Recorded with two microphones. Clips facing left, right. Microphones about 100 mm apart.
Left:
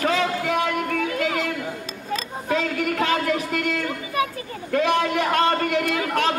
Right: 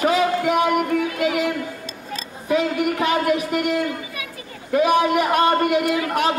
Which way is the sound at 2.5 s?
15° right (ahead or behind).